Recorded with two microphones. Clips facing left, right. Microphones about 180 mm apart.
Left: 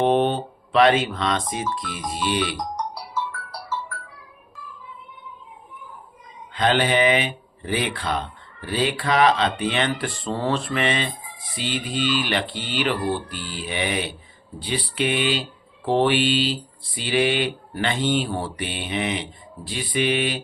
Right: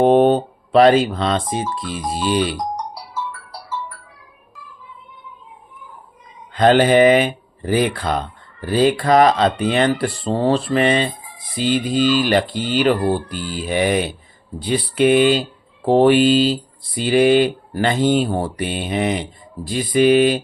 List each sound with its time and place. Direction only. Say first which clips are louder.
0.0 s speech: right 7 dB; 45° right (ahead or behind)
6.5 s speech: right 8 dB; 45° right (ahead or behind)